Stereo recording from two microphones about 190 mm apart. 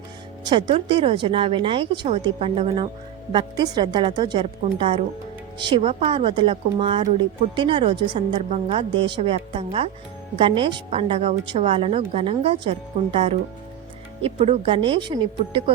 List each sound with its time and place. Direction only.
0.4 s speech: 25° right (ahead or behind)